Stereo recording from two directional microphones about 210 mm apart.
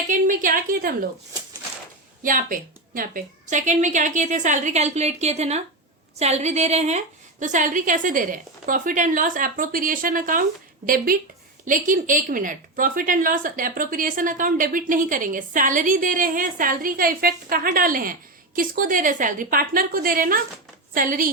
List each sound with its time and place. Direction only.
0.1 s a woman's voice: 40° right (ahead or behind)
2.2 s a woman's voice: 40° right (ahead or behind)